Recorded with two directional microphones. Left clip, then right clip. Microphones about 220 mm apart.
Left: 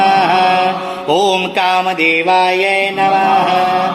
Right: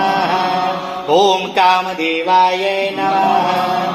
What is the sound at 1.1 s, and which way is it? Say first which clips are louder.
Music: even; 45° left (ahead or behind).